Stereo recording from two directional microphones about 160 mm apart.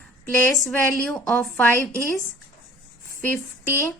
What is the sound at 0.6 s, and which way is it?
A woman's voice, 5° left (ahead or behind).